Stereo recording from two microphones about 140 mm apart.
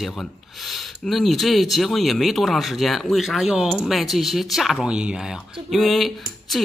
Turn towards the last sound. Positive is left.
turn(degrees=0)  # may be behind; listen again after turning